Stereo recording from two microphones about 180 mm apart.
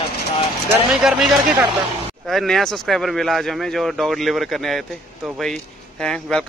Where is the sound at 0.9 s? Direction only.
Centre (ahead or behind).